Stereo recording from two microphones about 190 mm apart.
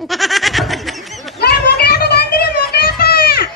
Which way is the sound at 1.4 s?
55° left (ahead or behind).